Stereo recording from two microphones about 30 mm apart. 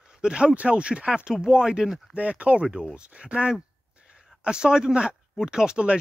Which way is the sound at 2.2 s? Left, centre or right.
Right.